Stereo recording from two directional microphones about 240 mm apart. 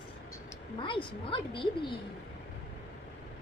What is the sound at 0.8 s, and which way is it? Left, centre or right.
A woman's voice, left.